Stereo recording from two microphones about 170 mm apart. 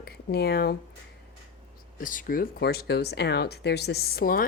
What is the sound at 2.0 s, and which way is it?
Speech, 50° left (ahead or behind).